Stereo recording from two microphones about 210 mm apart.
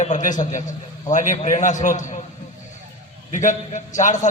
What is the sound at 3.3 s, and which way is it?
Speech, 35° left (ahead or behind).